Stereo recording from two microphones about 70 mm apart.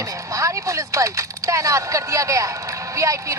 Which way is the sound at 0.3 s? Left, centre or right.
Right.